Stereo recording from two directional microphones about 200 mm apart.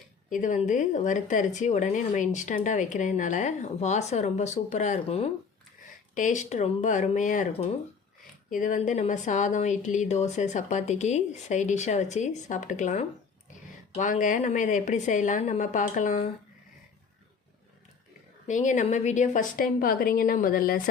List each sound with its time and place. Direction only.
0.3 s speech: 40° left (ahead or behind)
18.4 s a woman's voice: 40° left (ahead or behind)